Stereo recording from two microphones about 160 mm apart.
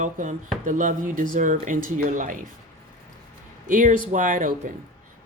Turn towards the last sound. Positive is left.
turn(degrees=-55)  # may be behind; listen again after turning